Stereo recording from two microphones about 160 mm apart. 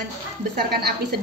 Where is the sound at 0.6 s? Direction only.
80° right.